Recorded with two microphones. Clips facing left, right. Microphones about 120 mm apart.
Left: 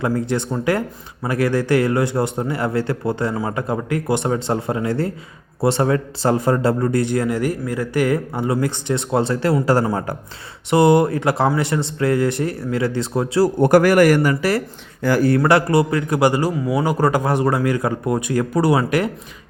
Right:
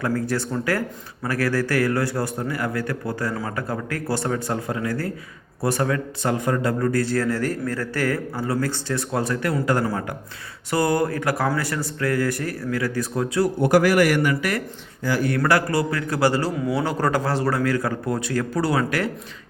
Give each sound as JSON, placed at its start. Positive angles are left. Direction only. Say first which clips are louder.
{"t": 0.0, "sound": "a man's voice", "louder": "left 3 dB", "side_deg": 20}
{"t": 13.6, "sound": "a man's voice", "louder": "left 4 dB", "side_deg": 50}
{"t": 15.0, "sound": "speech", "louder": "left 6 dB", "side_deg": 70}
{"t": 15.4, "sound": "a man's voice", "louder": "left 5 dB", "side_deg": 20}